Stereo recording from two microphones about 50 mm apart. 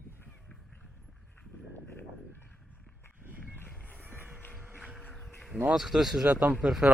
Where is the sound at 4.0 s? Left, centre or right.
Right.